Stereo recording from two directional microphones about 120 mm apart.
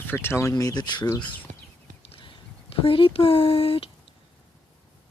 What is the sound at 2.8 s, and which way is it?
Speech, 50° left (ahead or behind).